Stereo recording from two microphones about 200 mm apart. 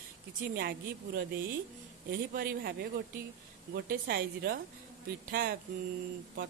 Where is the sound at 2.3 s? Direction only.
50° right (ahead or behind).